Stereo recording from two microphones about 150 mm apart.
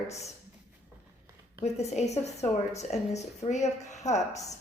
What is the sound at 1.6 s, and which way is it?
A woman's voice, 45° left (ahead or behind).